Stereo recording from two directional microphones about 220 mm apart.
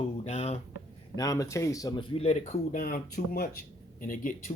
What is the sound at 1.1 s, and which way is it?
Speech, 15° left (ahead or behind).